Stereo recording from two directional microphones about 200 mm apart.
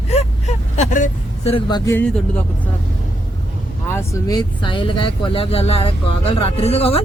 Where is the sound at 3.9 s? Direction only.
15° left (ahead or behind).